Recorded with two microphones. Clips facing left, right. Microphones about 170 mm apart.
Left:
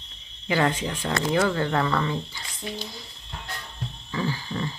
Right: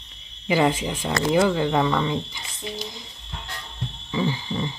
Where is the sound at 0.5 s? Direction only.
10° right (ahead or behind).